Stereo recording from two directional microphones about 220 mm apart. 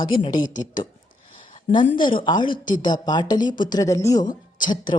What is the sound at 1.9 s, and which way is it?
Speech, 20° left (ahead or behind).